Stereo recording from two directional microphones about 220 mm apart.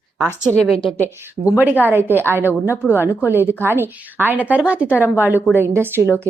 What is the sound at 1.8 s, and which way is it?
A woman's voice, 10° right (ahead or behind).